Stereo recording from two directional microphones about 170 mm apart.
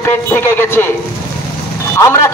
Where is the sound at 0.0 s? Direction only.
15° left (ahead or behind).